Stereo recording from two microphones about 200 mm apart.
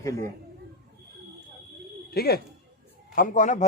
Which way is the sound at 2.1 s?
50° left (ahead or behind).